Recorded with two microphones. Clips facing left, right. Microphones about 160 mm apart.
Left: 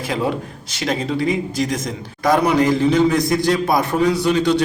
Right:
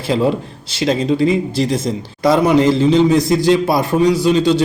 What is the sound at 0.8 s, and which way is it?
Speech, 25° right (ahead or behind).